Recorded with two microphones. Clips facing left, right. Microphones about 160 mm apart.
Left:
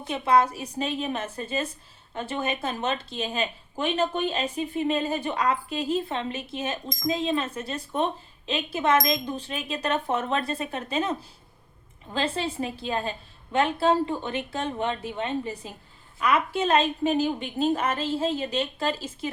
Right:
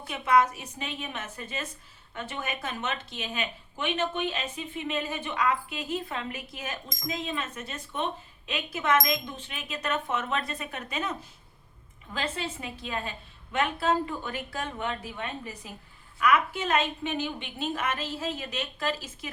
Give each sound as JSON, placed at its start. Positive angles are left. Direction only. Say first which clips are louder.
{"t": 0.0, "sound": "a woman's voice", "louder": "left 2 dB", "side_deg": 30}